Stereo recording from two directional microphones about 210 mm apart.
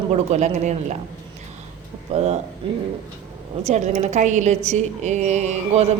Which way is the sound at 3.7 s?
35° right (ahead or behind).